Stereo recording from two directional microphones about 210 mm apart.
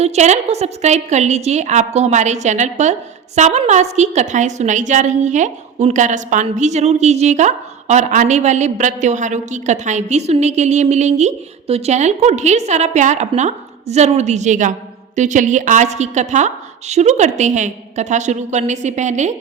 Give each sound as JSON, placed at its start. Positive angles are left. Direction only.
{"t": 0.0, "sound": "a woman's voice", "side_deg": -30}